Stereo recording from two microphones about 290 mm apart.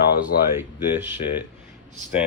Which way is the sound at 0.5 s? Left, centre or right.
Centre.